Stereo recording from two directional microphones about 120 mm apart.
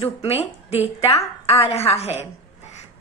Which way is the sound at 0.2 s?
55° left (ahead or behind).